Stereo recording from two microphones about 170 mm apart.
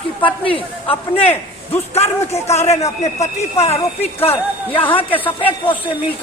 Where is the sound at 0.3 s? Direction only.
30° left (ahead or behind).